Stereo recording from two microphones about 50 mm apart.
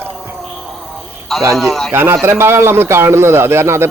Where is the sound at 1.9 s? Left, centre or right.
Right.